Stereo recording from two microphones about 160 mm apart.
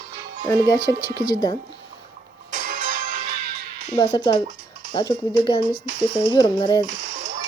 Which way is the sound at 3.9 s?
30° left (ahead or behind).